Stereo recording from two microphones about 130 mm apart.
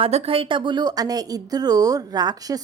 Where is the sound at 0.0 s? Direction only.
50° right (ahead or behind).